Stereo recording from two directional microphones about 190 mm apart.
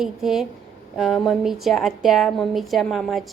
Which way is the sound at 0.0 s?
Centre (ahead or behind).